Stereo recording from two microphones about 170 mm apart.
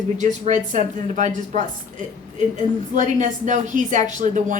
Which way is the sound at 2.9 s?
50° right (ahead or behind).